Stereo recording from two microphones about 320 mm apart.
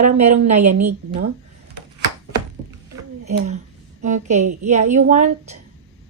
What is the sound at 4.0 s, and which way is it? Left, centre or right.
Speech, right.